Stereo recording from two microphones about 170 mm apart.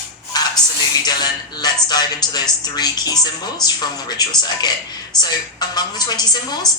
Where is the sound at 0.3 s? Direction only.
25° left (ahead or behind).